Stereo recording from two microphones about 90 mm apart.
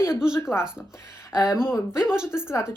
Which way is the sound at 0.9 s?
30° left (ahead or behind).